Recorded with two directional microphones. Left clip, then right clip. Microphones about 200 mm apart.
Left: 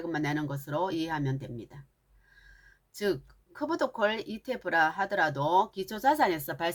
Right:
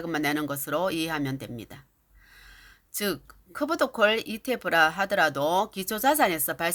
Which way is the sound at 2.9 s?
40° right (ahead or behind).